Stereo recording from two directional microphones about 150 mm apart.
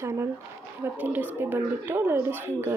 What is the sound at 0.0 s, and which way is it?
Speech, 20° right (ahead or behind).